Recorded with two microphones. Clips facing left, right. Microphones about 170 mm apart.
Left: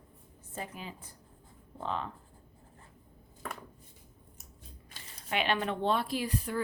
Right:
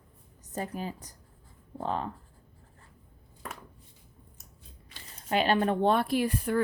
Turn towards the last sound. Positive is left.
turn(degrees=-55)  # may be behind; listen again after turning